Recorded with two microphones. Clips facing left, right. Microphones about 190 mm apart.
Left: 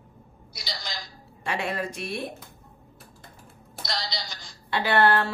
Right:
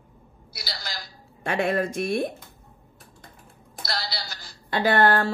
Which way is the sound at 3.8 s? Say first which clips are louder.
Right 1 dB; 5° right (ahead or behind).